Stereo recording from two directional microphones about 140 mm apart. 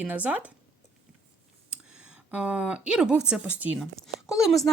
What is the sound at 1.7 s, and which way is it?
Speech, 5° right (ahead or behind).